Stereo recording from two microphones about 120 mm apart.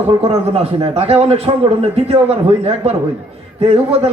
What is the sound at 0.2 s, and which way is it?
A man's voice, 55° right (ahead or behind).